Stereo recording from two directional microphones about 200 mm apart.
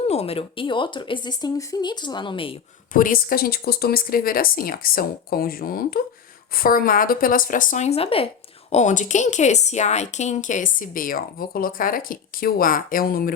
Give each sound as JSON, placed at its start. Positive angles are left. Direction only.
{"t": 0.0, "sound": "speech", "side_deg": 30}
{"t": 2.9, "sound": "speech", "side_deg": 45}